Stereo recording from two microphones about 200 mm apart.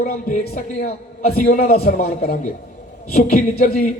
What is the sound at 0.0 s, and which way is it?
A man's voice, 35° left (ahead or behind).